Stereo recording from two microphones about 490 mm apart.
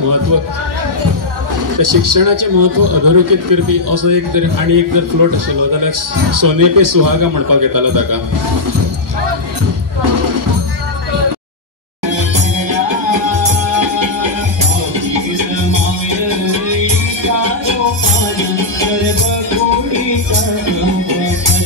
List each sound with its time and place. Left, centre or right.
0.3 s a man's voice: right
1.8 s a man's voice: right
12.1 s music: right